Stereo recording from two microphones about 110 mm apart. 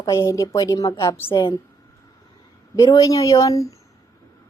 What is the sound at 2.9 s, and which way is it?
Speech, 30° left (ahead or behind).